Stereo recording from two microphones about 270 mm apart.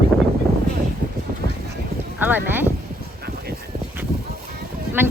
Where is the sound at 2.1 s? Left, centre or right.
Centre.